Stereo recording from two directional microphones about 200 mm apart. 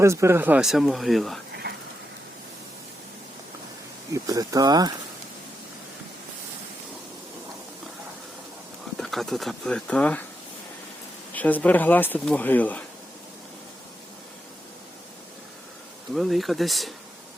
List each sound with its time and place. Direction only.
0.0 s speech: 15° right (ahead or behind)
1.6 s a sound: 50° right (ahead or behind)
4.1 s speech: 15° right (ahead or behind)
9.0 s speech: centre (ahead or behind)
11.3 s speech: 10° left (ahead or behind)
16.1 s speech: centre (ahead or behind)